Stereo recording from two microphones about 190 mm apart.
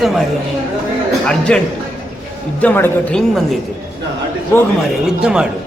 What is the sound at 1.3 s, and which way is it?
A man's voice, 5° left (ahead or behind).